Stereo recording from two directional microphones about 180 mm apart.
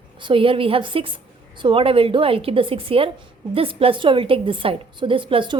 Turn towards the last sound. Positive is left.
turn(degrees=-25)  # may be behind; listen again after turning